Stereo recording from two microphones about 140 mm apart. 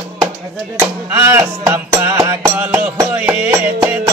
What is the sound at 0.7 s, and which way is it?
Music, 20° right (ahead or behind).